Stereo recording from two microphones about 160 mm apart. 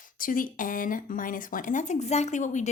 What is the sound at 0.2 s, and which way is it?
Speech, 60° left (ahead or behind).